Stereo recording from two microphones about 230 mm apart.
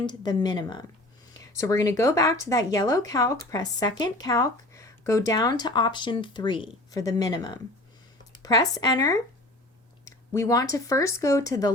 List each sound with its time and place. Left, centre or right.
0.0 s speech: centre